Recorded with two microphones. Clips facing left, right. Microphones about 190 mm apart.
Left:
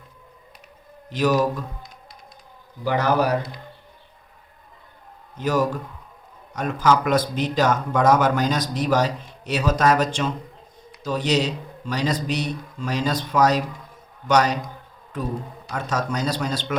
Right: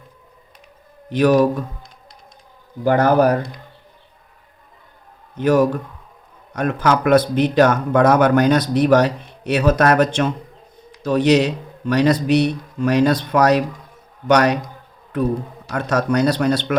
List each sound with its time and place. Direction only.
1.1 s speech: 60° right (ahead or behind)
2.8 s a man's voice: 50° right (ahead or behind)
5.4 s speech: 60° right (ahead or behind)
15.7 s speech: 60° right (ahead or behind)